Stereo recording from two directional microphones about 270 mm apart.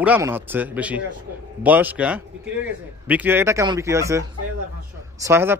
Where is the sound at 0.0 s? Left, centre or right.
Centre.